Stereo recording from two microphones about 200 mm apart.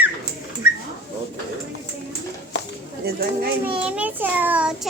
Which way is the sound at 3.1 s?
50° right (ahead or behind).